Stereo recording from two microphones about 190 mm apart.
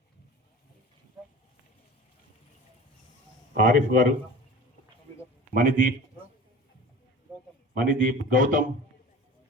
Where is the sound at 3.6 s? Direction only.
45° right (ahead or behind).